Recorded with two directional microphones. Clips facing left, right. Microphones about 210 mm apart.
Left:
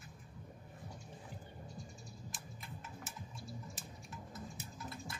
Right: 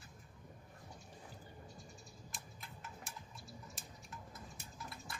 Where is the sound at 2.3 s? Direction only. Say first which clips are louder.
Left 3 dB; centre (ahead or behind).